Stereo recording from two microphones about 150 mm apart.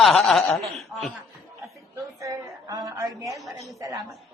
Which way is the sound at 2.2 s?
20° right (ahead or behind).